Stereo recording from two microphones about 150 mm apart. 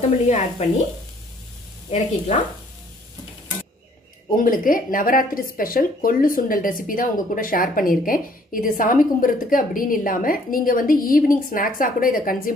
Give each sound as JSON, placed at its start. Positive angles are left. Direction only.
{"t": 0.3, "sound": "speech", "side_deg": 50}
{"t": 1.9, "sound": "speech", "side_deg": 50}
{"t": 4.4, "sound": "speech", "side_deg": 65}